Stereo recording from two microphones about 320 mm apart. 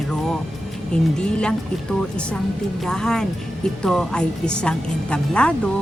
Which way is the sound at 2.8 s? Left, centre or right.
Centre.